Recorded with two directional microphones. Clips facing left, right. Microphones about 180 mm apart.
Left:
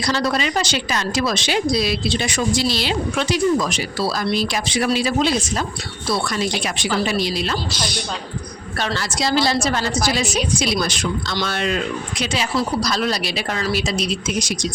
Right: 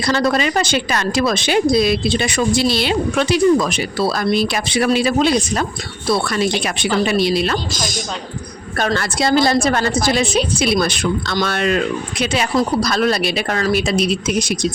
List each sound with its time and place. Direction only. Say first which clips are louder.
0.0 s a woman's voice: right 4 dB; 55° right (ahead or behind)